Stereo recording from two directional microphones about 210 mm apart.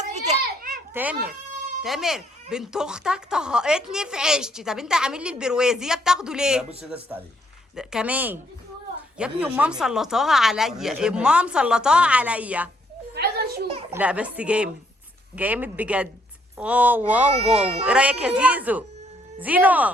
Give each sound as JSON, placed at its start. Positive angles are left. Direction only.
{"t": 0.1, "sound": "children playing", "side_deg": -40}
{"t": 1.8, "sound": "speech", "side_deg": 0}
{"t": 7.8, "sound": "speech", "side_deg": -5}
{"t": 13.1, "sound": "a sound", "side_deg": -50}
{"t": 13.9, "sound": "speech", "side_deg": -5}